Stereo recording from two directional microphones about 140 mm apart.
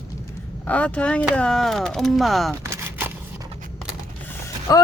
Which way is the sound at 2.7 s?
15° right (ahead or behind).